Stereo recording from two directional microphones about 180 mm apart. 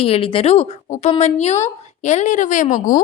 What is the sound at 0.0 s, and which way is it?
A woman's voice, 30° left (ahead or behind).